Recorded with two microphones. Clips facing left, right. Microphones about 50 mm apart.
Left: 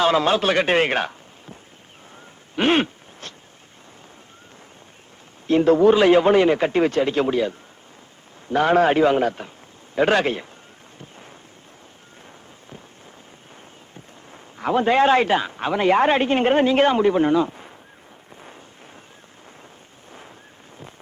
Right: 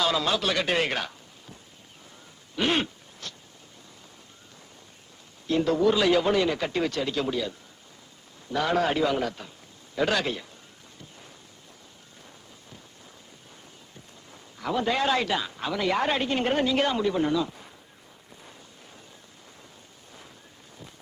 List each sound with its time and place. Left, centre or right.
0.0 s a man's voice: left
2.6 s a sound: left
5.5 s a man's voice: left
10.9 s boat: left
13.9 s a man's voice: left